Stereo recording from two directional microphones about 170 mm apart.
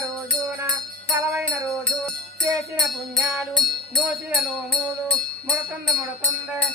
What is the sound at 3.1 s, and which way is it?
Music, centre (ahead or behind).